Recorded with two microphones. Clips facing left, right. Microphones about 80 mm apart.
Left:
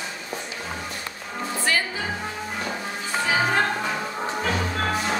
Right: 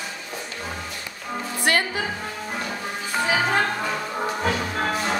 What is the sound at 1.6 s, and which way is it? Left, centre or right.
Music, right.